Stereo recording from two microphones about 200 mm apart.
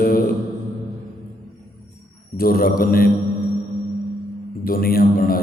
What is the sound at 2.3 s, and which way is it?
Speech, 50° left (ahead or behind).